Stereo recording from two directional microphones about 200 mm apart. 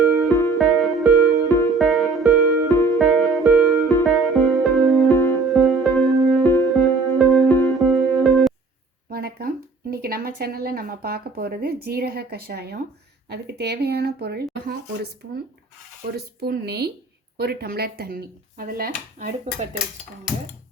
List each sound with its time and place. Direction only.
0.0 s music: centre (ahead or behind)
0.3 s music: 15° left (ahead or behind)
0.6 s music: centre (ahead or behind)
1.5 s music: 15° left (ahead or behind)
1.7 s music: centre (ahead or behind)
2.6 s music: 15° left (ahead or behind)
3.0 s music: centre (ahead or behind)
5.1 s music: 15° left (ahead or behind)
5.4 s music: centre (ahead or behind)
6.4 s music: 15° left (ahead or behind)
7.3 s music: centre (ahead or behind)
9.0 s a sound: 50° right (ahead or behind)
9.9 s speech: 50° right (ahead or behind)
16.1 s speech: 50° right (ahead or behind)